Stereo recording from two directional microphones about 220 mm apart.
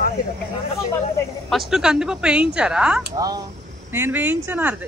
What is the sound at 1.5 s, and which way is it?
Speech, centre (ahead or behind).